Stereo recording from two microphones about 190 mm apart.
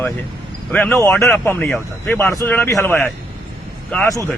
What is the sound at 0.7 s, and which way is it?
A man's voice, 5° left (ahead or behind).